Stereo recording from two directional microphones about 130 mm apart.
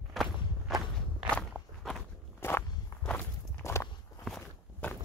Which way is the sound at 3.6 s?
20° left (ahead or behind).